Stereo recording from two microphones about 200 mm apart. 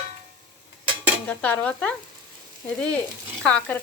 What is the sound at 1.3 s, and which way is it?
Speech, 10° left (ahead or behind).